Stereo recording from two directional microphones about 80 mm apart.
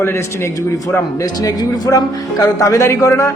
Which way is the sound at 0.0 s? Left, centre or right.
Left.